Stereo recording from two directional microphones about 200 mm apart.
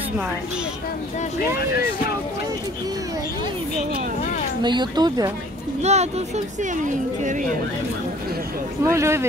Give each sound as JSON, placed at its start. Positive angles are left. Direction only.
{"t": 4.6, "sound": "speech", "side_deg": -20}
{"t": 5.8, "sound": "speech", "side_deg": -35}
{"t": 8.8, "sound": "speech", "side_deg": -15}